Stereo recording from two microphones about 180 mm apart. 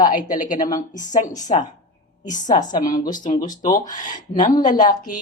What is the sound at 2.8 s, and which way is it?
Speech, 45° left (ahead or behind).